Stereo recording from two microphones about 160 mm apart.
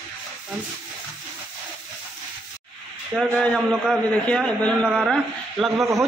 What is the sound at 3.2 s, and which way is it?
A man's voice, centre (ahead or behind).